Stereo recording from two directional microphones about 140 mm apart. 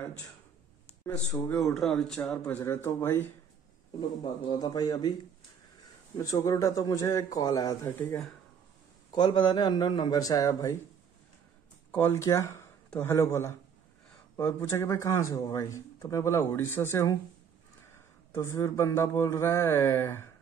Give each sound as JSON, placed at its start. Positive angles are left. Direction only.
{"t": 1.5, "sound": "speech", "side_deg": 0}
{"t": 4.2, "sound": "speech", "side_deg": 30}
{"t": 6.1, "sound": "speech", "side_deg": 25}
{"t": 9.1, "sound": "speech", "side_deg": 35}
{"t": 11.9, "sound": "speech", "side_deg": 15}
{"t": 18.3, "sound": "speech", "side_deg": 20}